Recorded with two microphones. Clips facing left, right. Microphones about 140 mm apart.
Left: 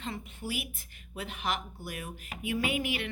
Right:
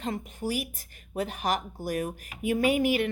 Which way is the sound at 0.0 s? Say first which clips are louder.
Right 7 dB; 40° right (ahead or behind).